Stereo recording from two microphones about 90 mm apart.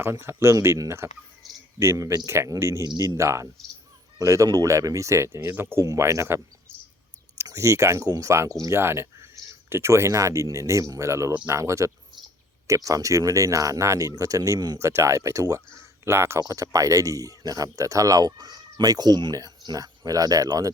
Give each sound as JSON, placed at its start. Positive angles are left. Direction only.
{"t": 0.0, "sound": "speech", "side_deg": -30}
{"t": 1.4, "sound": "speech", "side_deg": 0}
{"t": 1.8, "sound": "speech", "side_deg": -30}
{"t": 2.8, "sound": "speech", "side_deg": -45}
{"t": 7.4, "sound": "speech", "side_deg": -35}
{"t": 8.7, "sound": "speech", "side_deg": -30}
{"t": 14.8, "sound": "speech", "side_deg": -35}